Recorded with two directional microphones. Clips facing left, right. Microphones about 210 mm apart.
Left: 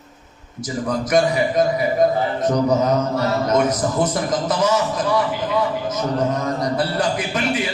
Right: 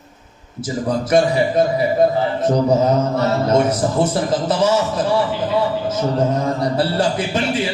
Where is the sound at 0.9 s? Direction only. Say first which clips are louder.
Right 2 dB; 30° right (ahead or behind).